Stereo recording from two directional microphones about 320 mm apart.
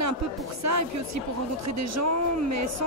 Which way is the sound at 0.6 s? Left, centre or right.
Right.